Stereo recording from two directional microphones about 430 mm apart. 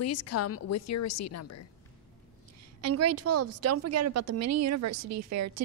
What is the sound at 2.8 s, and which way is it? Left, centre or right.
A woman's voice, right.